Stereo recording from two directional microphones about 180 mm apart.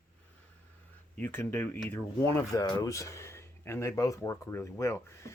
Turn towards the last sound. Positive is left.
turn(degrees=15)  # may be behind; listen again after turning